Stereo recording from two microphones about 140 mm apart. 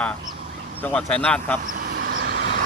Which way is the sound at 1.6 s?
75° right (ahead or behind).